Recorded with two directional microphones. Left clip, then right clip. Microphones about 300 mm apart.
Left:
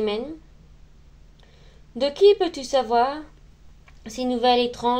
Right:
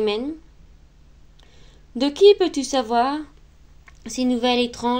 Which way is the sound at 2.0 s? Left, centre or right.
Right.